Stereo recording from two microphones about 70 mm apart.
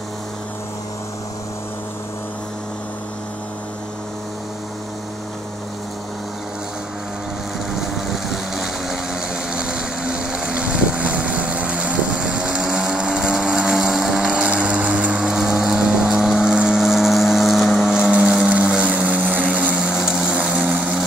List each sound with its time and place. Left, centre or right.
7.7 s vehicle: centre
17.9 s vehicle: centre
19.7 s vehicle: centre